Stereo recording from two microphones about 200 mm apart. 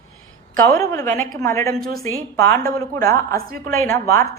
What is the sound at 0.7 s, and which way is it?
A woman's voice, 15° left (ahead or behind).